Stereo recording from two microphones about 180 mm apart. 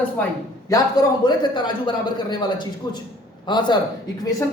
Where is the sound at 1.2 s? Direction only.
25° left (ahead or behind).